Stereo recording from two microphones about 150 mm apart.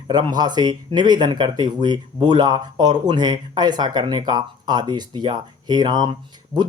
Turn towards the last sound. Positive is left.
turn(degrees=-30)  # may be behind; listen again after turning